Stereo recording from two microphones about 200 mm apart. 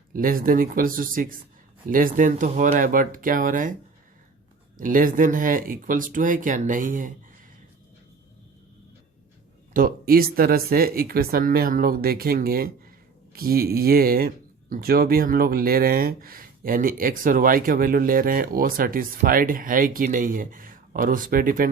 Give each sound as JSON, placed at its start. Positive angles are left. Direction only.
{"t": 0.1, "sound": "speech", "side_deg": -45}
{"t": 4.8, "sound": "speech", "side_deg": -45}
{"t": 9.7, "sound": "speech", "side_deg": -45}